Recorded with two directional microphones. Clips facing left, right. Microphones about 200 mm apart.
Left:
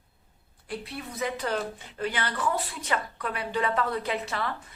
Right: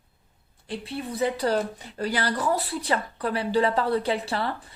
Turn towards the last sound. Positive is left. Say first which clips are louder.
# right 4 dB
turn(degrees=-30)  # may be behind; listen again after turning